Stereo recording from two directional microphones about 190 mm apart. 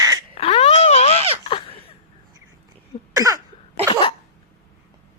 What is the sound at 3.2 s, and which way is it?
Cough, 20° right (ahead or behind).